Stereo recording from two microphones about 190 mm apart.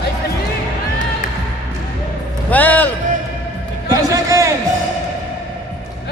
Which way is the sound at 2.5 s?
10° left (ahead or behind).